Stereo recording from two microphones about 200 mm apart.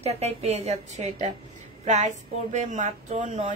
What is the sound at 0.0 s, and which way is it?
A woman's voice, 30° right (ahead or behind).